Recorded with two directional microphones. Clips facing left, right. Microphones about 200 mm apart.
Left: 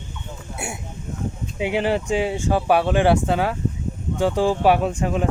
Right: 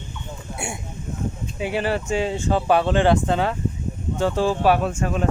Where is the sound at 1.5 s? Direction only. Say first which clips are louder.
Left 3 dB; 15° left (ahead or behind).